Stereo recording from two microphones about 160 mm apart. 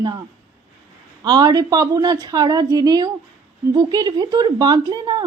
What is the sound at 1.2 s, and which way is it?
Speech, 25° right (ahead or behind).